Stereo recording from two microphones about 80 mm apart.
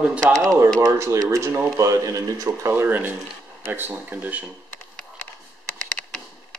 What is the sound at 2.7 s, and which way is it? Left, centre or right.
Speech, right.